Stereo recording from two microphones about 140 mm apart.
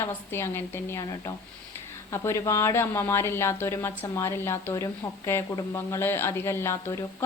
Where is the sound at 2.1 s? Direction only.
20° left (ahead or behind).